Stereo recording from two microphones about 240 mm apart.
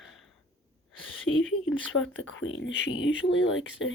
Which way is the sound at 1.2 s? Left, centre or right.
Left.